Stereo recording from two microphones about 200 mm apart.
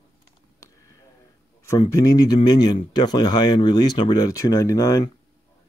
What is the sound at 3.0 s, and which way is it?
Speech, 20° left (ahead or behind).